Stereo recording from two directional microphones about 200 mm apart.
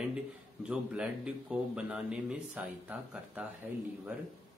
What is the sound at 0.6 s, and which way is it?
A man's voice, 5° right (ahead or behind).